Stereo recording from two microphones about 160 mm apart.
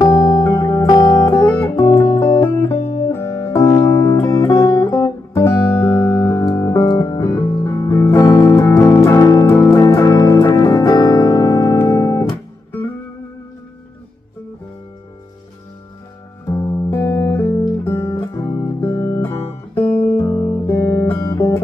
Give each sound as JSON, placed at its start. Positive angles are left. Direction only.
{"t": 0.0, "sound": "music", "side_deg": 20}
{"t": 16.4, "sound": "music", "side_deg": 20}
{"t": 17.5, "sound": "guitar", "side_deg": 20}
{"t": 18.8, "sound": "music", "side_deg": 15}
{"t": 19.7, "sound": "guitar", "side_deg": 10}
{"t": 20.2, "sound": "guitar", "side_deg": 20}